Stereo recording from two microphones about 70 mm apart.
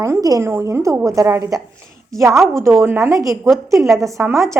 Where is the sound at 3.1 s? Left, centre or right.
Right.